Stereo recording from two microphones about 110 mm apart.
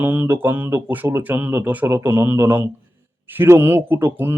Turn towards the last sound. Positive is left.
turn(degrees=-20)  # may be behind; listen again after turning